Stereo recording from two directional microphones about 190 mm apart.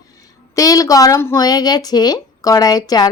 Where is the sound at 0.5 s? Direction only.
20° left (ahead or behind).